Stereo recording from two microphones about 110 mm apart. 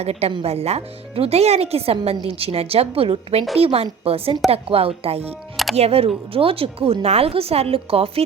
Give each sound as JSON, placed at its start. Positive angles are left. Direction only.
{"t": 0.0, "sound": "a woman's voice", "side_deg": -70}